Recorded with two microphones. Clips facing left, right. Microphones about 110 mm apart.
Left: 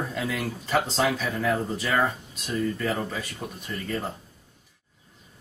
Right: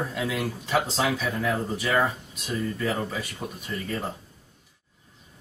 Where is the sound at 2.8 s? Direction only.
5° right (ahead or behind).